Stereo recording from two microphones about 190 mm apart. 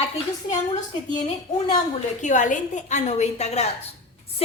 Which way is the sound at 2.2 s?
40° left (ahead or behind).